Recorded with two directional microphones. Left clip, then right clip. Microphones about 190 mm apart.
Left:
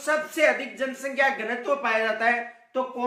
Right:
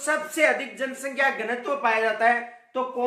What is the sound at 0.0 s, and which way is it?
Speech, 5° right (ahead or behind).